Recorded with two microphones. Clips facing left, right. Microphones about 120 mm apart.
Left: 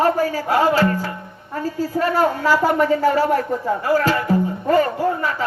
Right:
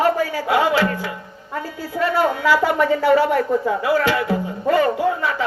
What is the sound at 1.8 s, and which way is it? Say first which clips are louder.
A woman's voice: left 1 dB; 45° left (ahead or behind).